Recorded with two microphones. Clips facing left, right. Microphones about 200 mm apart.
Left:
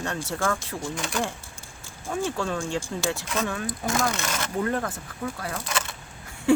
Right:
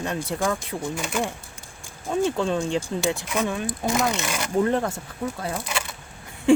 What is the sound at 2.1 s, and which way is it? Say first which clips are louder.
Speech: right 5 dB; 20° right (ahead or behind).